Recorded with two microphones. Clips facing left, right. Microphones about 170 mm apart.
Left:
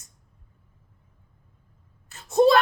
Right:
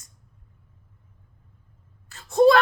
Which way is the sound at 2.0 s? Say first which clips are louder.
Right 1 dB; 20° left (ahead or behind).